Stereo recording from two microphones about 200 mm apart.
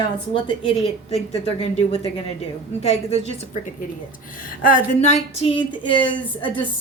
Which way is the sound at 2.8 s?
35° left (ahead or behind).